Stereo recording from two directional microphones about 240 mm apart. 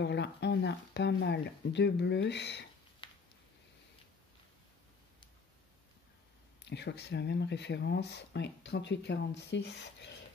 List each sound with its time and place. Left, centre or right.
0.0 s speech: left
3.0 s a sound: centre
6.6 s speech: left